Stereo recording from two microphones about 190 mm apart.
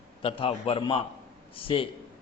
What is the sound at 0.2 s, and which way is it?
A man's voice, 30° left (ahead or behind).